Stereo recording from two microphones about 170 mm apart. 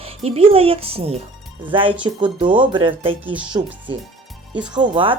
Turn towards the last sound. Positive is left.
turn(degrees=-30)  # may be behind; listen again after turning